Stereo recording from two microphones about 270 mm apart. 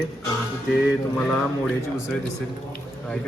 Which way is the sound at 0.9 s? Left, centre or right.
Centre.